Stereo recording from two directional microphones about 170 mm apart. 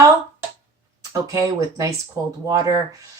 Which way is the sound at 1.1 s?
20° right (ahead or behind).